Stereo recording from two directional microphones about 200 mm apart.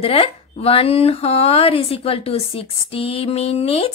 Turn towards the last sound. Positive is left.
turn(degrees=30)  # may be behind; listen again after turning